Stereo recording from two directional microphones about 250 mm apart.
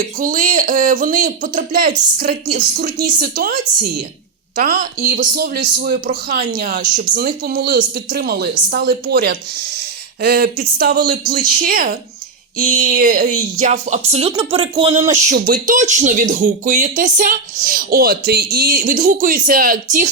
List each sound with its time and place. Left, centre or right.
0.0 s speech: right